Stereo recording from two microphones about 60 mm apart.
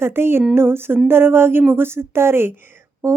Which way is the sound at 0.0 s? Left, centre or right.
Right.